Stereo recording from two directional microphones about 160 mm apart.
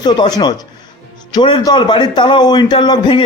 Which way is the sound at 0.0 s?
25° left (ahead or behind).